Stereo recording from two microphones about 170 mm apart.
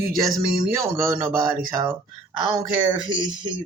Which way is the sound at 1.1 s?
60° right (ahead or behind).